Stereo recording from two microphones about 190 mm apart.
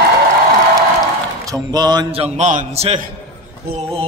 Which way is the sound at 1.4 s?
20° right (ahead or behind).